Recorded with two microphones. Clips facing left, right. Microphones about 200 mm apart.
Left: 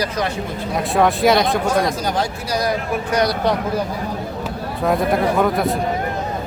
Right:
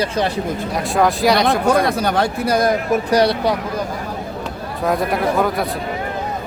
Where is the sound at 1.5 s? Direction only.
60° right (ahead or behind).